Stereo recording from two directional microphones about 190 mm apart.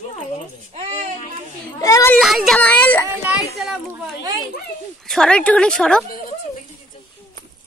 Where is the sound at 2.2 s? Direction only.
Centre (ahead or behind).